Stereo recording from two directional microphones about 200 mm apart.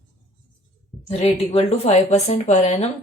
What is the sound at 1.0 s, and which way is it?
A woman's voice, 30° left (ahead or behind).